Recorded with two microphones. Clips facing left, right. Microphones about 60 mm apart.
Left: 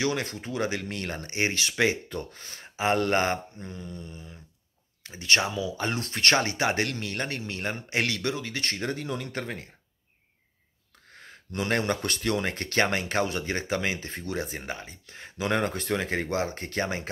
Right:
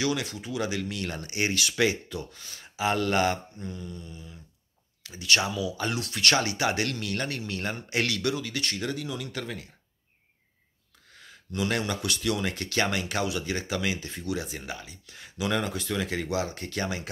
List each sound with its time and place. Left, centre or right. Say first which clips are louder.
0.0 s speech: even; left
2.0 s speech: left 1 dB; left
11.1 s speech: right 1 dB; left